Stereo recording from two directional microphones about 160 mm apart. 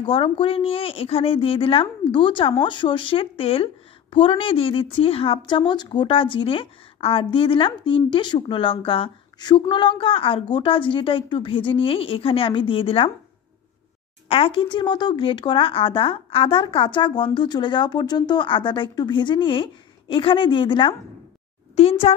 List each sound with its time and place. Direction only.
0.0 s speech: 35° left (ahead or behind)
14.3 s speech: 35° left (ahead or behind)